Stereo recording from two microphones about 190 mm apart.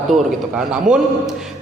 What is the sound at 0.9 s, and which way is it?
Speech, 40° right (ahead or behind).